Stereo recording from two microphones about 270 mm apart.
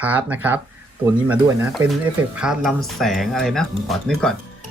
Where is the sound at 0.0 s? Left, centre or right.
Centre.